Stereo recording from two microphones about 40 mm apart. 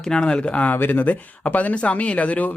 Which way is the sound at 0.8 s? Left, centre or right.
Left.